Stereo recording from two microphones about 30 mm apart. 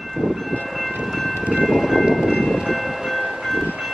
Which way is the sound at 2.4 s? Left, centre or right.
Centre.